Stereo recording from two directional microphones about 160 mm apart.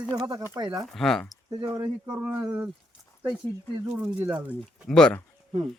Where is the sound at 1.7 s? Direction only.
20° right (ahead or behind).